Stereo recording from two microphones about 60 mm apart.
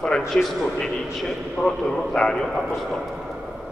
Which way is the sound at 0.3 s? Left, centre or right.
Centre.